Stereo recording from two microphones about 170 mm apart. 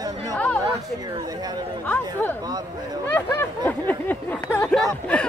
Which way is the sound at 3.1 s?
15° left (ahead or behind).